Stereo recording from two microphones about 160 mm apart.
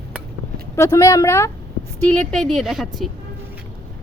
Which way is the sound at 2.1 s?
5° left (ahead or behind).